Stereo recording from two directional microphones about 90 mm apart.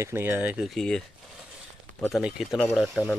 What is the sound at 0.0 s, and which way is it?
Speech, 25° right (ahead or behind).